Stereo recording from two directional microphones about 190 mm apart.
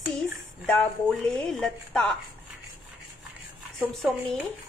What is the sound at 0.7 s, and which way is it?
A woman's voice, 5° left (ahead or behind).